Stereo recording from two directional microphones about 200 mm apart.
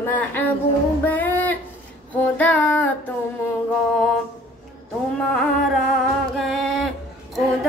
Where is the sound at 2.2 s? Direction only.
10° left (ahead or behind).